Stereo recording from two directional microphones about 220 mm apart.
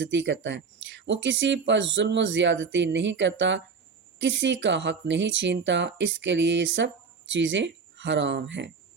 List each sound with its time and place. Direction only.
0.0 s speech: 55° right (ahead or behind)